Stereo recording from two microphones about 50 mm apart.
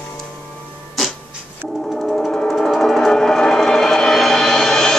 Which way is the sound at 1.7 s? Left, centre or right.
Centre.